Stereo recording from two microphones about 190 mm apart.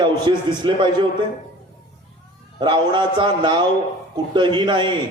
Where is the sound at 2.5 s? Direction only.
25° right (ahead or behind).